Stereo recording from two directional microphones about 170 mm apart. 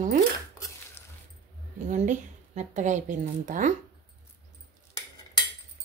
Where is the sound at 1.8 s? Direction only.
45° right (ahead or behind).